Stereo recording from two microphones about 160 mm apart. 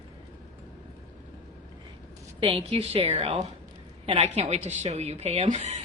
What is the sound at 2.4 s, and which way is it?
A woman's voice, 30° right (ahead or behind).